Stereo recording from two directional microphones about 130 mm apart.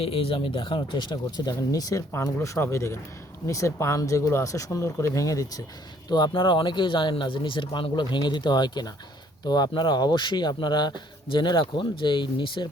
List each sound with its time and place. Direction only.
0.0 s speech: 45° left (ahead or behind)